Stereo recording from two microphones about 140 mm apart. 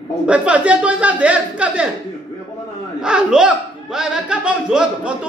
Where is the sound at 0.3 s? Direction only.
10° right (ahead or behind).